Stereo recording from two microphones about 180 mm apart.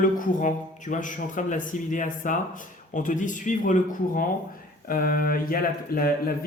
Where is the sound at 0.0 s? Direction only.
45° left (ahead or behind).